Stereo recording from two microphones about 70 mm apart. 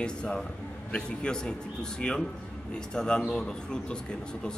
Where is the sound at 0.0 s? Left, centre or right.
Centre.